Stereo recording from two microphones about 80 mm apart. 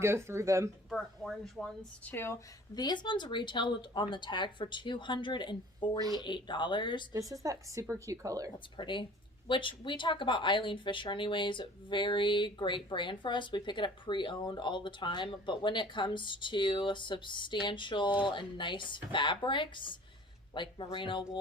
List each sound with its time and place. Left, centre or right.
0.0 s speech: right
0.9 s speech: centre
2.0 s speech: left
2.7 s speech: left
7.1 s a woman's voice: right
8.5 s speech: left